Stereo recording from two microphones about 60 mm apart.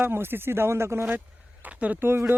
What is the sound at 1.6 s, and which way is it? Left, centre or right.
Speech, right.